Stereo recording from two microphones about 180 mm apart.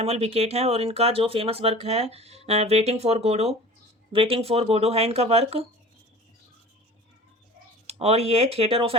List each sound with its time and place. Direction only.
0.0 s speech: 35° right (ahead or behind)
7.9 s speech: 35° right (ahead or behind)